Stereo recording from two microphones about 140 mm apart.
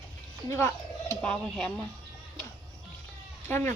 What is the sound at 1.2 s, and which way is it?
Speech, 5° left (ahead or behind).